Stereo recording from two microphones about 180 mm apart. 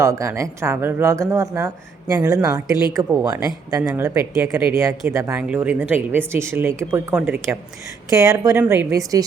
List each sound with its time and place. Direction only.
0.0 s a woman's voice: 15° right (ahead or behind)